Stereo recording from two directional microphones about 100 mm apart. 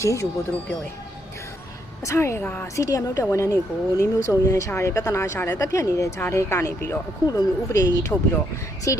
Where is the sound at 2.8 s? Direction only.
35° left (ahead or behind).